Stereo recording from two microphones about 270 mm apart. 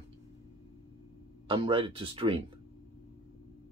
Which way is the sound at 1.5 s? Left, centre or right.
Centre.